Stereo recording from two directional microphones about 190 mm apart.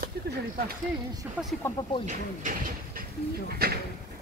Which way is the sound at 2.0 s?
45° right (ahead or behind).